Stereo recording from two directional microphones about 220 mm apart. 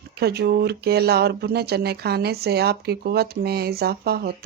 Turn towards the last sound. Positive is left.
turn(degrees=-45)  # may be behind; listen again after turning